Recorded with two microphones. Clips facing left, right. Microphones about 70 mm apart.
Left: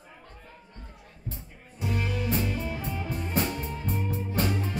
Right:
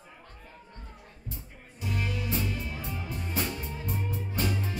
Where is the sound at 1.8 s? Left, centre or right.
Left.